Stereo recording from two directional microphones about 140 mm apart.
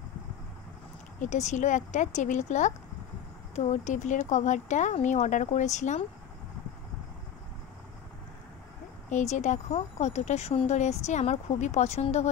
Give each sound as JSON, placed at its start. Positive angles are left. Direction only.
{"t": 1.2, "sound": "speech", "side_deg": 60}
{"t": 9.1, "sound": "speech", "side_deg": 55}